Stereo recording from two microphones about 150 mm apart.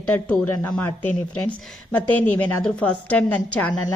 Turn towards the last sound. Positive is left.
turn(degrees=10)  # may be behind; listen again after turning